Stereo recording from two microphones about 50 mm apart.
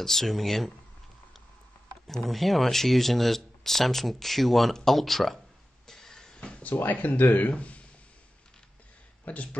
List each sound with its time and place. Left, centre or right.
0.0 s speech: centre
2.0 s speech: centre
5.9 s a sound: centre
6.6 s speech: left
9.2 s speech: left